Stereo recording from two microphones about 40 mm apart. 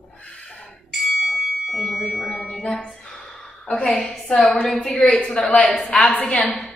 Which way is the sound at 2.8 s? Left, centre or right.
Centre.